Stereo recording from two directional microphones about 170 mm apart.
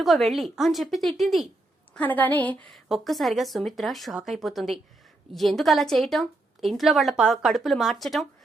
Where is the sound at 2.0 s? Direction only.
10° left (ahead or behind).